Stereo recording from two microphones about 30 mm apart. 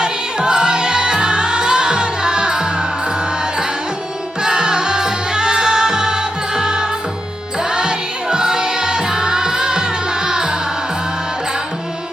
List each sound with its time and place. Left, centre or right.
0.0 s music: right
4.4 s music: right